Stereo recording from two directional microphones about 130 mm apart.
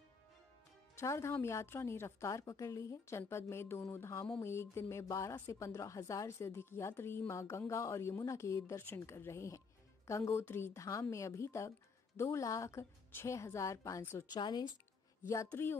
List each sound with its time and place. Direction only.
0.9 s a woman's voice: 20° left (ahead or behind)
14.3 s speech: 35° left (ahead or behind)
15.4 s speech: 15° left (ahead or behind)